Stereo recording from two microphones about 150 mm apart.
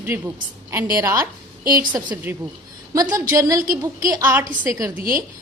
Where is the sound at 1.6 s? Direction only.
75° right (ahead or behind).